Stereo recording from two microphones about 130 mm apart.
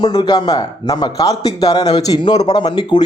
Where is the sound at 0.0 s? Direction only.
30° left (ahead or behind).